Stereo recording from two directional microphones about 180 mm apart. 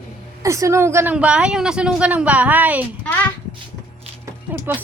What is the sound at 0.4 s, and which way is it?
Speech, 15° right (ahead or behind).